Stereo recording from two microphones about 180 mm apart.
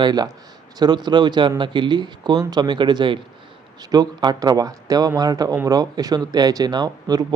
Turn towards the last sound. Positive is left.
turn(degrees=-20)  # may be behind; listen again after turning